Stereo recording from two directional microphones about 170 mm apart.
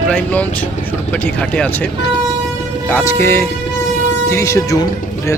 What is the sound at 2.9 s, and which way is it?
Speech, 15° left (ahead or behind).